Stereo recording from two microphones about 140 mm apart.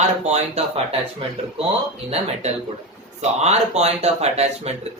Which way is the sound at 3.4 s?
50° right (ahead or behind).